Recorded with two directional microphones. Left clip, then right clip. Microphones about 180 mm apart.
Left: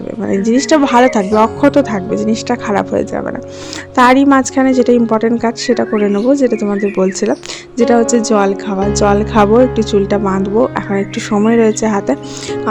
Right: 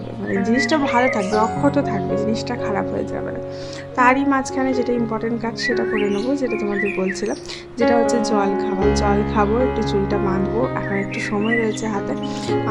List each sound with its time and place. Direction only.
0.3 s speech: 50° left (ahead or behind)